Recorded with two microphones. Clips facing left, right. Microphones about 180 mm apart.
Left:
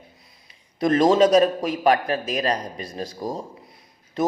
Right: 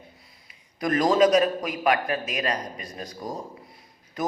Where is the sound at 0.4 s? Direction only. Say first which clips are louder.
Left 6 dB; 25° left (ahead or behind).